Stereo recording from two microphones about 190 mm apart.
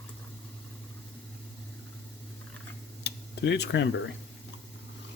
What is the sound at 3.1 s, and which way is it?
Tick-tock, 65° left (ahead or behind).